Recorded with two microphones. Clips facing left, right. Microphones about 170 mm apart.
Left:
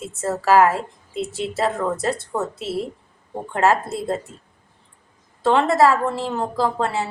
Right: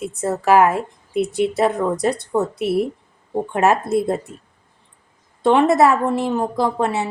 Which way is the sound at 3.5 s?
20° right (ahead or behind).